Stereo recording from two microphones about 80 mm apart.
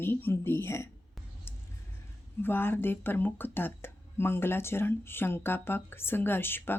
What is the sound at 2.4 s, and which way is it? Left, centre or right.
Speech, left.